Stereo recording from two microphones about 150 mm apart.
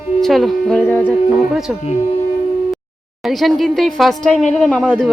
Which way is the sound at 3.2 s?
Centre (ahead or behind).